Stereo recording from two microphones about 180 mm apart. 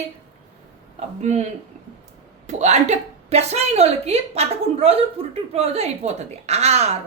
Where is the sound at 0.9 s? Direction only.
40° right (ahead or behind).